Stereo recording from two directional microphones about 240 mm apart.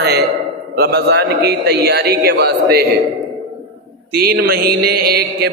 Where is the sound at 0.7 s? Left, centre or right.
Right.